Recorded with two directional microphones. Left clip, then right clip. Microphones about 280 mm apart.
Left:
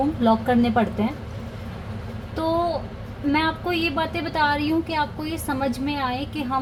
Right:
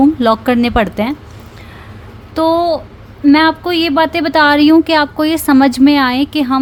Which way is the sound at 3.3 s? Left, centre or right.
Right.